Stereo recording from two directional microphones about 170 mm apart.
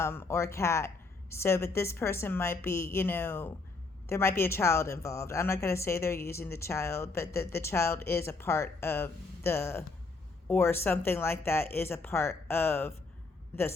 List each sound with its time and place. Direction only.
0.0 s speech: 15° left (ahead or behind)